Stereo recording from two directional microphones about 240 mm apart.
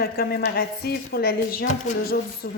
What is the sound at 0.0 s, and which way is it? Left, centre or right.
A woman's voice, left.